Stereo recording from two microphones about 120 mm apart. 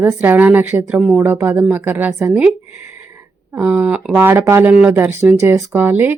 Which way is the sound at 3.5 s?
15° right (ahead or behind).